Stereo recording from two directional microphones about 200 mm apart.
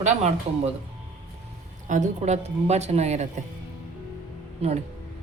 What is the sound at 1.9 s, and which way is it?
A woman's voice, 35° right (ahead or behind).